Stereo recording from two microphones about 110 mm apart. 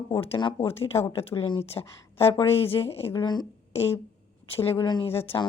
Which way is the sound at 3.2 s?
40° left (ahead or behind).